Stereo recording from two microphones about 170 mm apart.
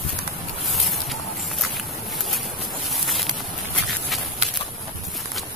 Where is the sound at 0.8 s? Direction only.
Centre (ahead or behind).